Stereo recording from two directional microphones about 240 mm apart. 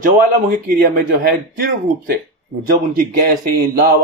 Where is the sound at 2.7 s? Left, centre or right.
Right.